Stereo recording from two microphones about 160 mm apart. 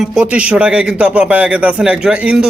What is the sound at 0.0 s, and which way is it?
A man's voice, 5° right (ahead or behind).